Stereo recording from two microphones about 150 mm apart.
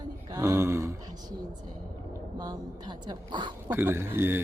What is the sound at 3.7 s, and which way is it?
Speech, 15° right (ahead or behind).